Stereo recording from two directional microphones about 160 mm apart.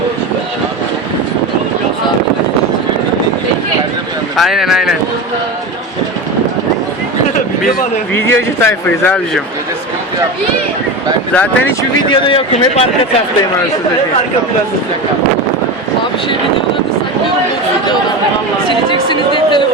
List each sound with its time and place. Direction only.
4.4 s speech: centre (ahead or behind)
8.1 s speech: 15° left (ahead or behind)
11.3 s speech: 10° left (ahead or behind)
12.0 s speech: 30° left (ahead or behind)
19.0 s a sound: 30° left (ahead or behind)